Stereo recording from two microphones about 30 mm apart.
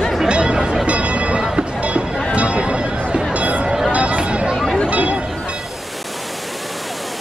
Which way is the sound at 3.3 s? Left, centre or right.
Right.